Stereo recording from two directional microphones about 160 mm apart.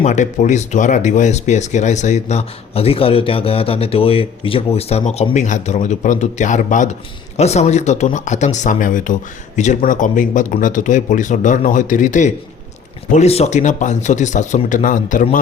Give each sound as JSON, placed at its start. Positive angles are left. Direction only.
{"t": 0.0, "sound": "speech", "side_deg": 50}